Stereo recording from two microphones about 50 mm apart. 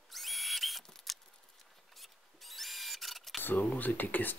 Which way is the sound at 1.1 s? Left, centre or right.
Centre.